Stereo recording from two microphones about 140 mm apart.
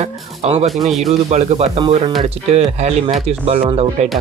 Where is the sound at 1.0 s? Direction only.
55° right (ahead or behind).